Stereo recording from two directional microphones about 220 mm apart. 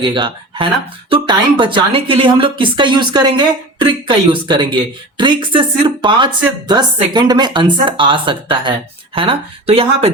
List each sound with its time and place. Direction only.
0.0 s a woman's voice: 20° right (ahead or behind)